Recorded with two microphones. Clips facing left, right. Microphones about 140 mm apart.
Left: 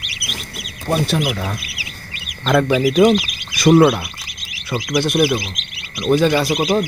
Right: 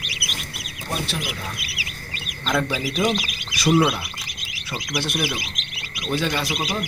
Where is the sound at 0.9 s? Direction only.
60° left (ahead or behind).